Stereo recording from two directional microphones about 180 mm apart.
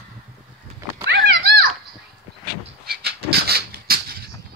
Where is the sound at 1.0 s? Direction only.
60° right (ahead or behind).